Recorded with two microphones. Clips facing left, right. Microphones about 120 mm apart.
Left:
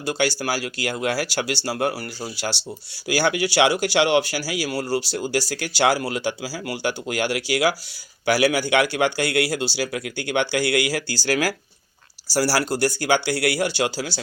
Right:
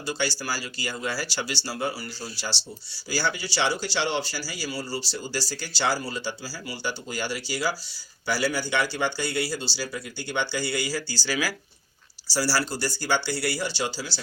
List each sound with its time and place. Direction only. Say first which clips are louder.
0.0 s speech: left 6 dB; 55° left (ahead or behind)